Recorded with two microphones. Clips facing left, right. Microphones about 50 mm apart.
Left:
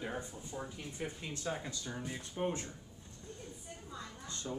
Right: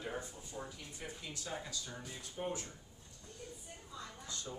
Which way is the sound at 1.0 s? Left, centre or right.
Left.